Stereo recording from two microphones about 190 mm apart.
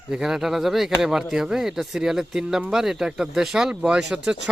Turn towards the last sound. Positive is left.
turn(degrees=-5)  # may be behind; listen again after turning